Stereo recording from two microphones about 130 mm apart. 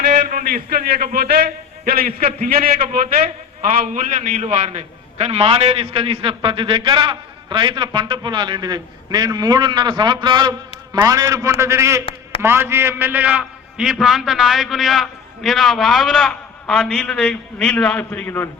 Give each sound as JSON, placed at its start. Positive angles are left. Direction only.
{"t": 0.1, "sound": "a man's voice", "side_deg": -90}
{"t": 3.6, "sound": "a man's voice", "side_deg": -75}